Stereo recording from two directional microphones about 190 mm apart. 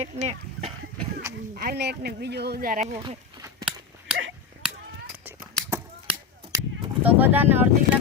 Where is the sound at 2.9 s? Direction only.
25° right (ahead or behind).